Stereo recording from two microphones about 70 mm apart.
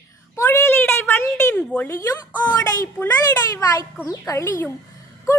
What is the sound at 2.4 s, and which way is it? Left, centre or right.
A child's voice, left.